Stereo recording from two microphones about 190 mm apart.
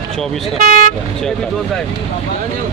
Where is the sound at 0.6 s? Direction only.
45° right (ahead or behind).